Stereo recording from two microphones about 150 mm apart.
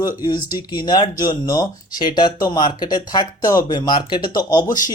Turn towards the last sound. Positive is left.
turn(degrees=25)  # may be behind; listen again after turning